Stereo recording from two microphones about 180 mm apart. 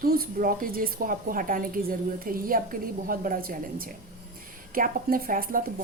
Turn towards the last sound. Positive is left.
turn(degrees=-50)  # may be behind; listen again after turning